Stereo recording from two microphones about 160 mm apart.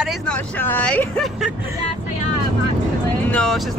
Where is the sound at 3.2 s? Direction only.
5° left (ahead or behind).